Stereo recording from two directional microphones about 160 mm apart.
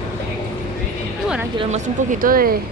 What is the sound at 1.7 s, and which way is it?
Speech, 55° right (ahead or behind).